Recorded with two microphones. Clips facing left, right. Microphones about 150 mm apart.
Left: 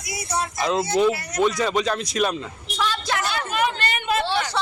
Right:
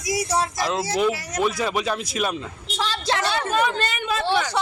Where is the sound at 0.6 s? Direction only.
5° right (ahead or behind).